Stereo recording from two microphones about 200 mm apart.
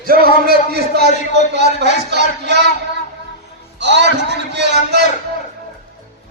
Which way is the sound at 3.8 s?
60° right (ahead or behind).